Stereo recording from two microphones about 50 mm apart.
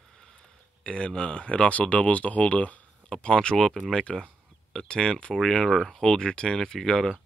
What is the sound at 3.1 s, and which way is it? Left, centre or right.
Speech, centre.